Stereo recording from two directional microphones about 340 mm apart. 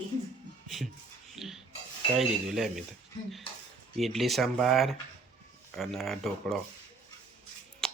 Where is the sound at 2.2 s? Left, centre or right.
Centre.